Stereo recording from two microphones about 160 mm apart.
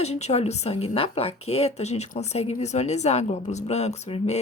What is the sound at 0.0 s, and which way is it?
A woman's voice, 40° left (ahead or behind).